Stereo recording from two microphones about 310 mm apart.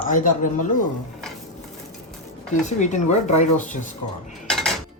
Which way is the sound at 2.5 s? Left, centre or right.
Left.